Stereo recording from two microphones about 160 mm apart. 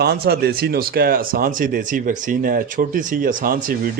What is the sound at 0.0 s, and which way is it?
A man's voice, 90° right.